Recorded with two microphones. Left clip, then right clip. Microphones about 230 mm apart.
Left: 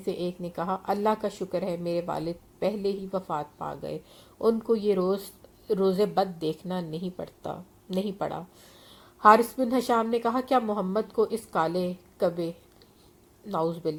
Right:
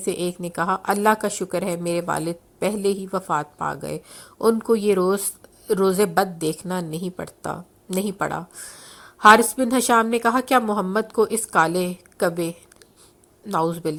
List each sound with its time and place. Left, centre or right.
0.0 s a woman's voice: right
8.9 s a sound: right
9.6 s a woman's voice: right